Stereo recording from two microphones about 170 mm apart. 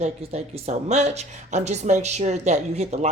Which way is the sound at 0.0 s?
40° right (ahead or behind).